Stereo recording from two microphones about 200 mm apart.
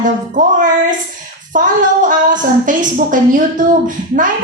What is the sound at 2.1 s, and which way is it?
A woman's voice, 40° right (ahead or behind).